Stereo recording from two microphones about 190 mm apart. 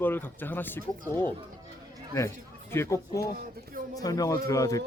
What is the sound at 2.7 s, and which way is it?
A man's voice, 15° left (ahead or behind).